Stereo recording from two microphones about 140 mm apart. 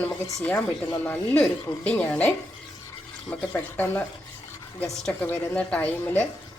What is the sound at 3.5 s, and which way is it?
Speech, 15° left (ahead or behind).